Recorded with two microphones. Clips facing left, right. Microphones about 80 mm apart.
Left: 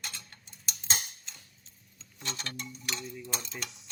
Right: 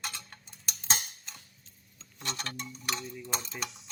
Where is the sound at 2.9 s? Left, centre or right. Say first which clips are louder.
Even; centre.